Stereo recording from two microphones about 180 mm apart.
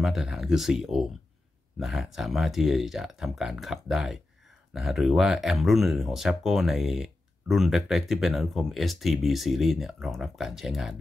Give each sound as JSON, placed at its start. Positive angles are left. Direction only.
{"t": 0.0, "sound": "speech", "side_deg": 0}